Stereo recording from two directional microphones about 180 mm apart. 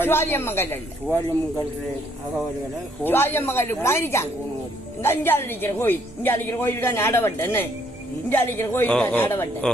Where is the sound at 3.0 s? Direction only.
10° left (ahead or behind).